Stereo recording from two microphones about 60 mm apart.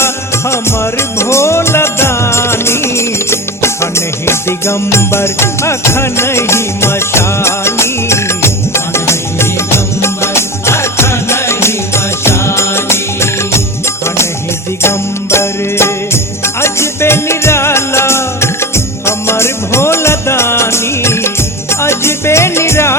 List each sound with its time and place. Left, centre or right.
0.5 s music: left
14.8 s music: left